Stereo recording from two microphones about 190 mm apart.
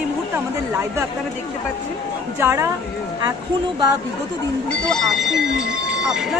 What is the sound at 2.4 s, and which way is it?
Speech, 15° right (ahead or behind).